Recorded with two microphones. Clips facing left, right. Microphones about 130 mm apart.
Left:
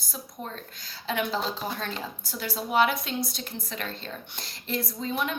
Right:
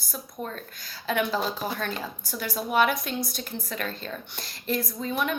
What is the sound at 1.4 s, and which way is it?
Speech, 5° right (ahead or behind).